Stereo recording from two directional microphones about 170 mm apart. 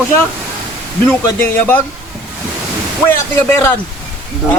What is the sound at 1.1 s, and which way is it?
Speech, 10° left (ahead or behind).